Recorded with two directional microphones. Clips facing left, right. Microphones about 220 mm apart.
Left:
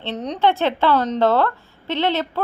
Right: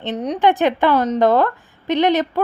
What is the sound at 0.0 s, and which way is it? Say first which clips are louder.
Speech: right 3 dB; 15° right (ahead or behind).